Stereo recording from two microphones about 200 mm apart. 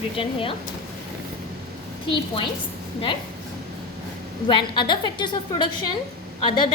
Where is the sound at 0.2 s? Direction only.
25° left (ahead or behind).